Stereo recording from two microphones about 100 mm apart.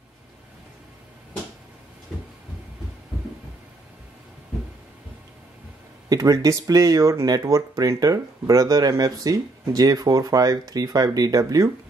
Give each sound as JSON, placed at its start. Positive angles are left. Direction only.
{"t": 6.0, "sound": "speech", "side_deg": -35}